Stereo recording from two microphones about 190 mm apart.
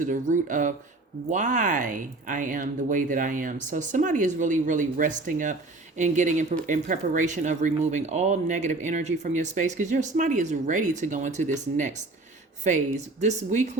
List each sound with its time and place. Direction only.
0.0 s speech: 45° right (ahead or behind)